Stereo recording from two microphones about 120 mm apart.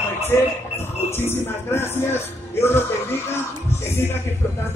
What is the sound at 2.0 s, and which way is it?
Speech, 20° left (ahead or behind).